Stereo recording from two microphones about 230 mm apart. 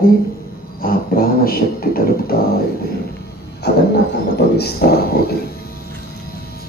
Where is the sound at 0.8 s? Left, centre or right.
Left.